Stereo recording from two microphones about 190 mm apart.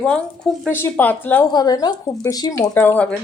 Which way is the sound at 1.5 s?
20° left (ahead or behind).